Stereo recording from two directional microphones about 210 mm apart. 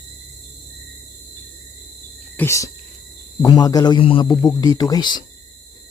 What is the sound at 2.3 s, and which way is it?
A man's voice, 10° left (ahead or behind).